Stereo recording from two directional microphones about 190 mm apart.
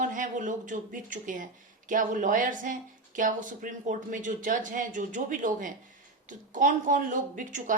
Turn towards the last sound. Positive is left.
turn(degrees=-45)  # may be behind; listen again after turning